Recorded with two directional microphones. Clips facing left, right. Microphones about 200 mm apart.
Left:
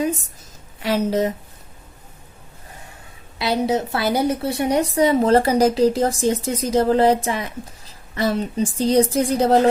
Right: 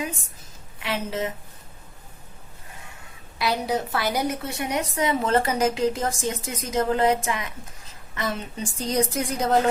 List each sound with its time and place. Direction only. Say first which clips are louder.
0.8 s a woman's voice: left 8 dB; 40° left (ahead or behind)
3.3 s a woman's voice: left 5 dB; 25° left (ahead or behind)